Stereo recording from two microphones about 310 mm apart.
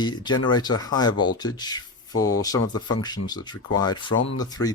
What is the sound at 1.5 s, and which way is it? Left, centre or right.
Speech, centre.